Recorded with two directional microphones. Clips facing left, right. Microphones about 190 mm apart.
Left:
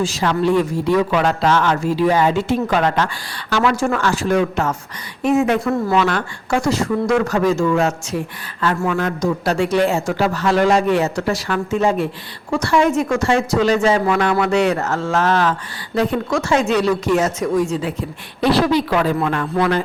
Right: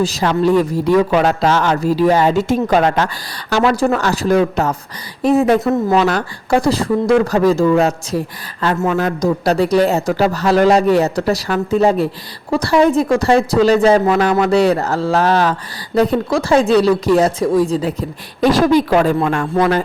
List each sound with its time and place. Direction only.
0.0 s a man's voice: 40° right (ahead or behind)